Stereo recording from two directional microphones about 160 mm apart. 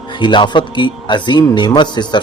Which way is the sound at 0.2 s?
30° left (ahead or behind).